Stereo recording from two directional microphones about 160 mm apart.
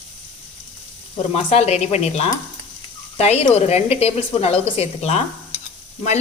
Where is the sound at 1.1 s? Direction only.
40° left (ahead or behind).